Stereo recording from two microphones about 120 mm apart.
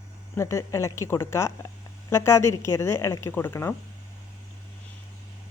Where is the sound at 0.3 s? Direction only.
25° left (ahead or behind).